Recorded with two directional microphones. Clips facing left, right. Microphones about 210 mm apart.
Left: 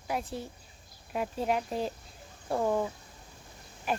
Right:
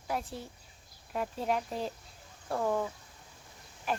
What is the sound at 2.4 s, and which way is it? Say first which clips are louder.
Speech: left 3 dB; 15° left (ahead or behind).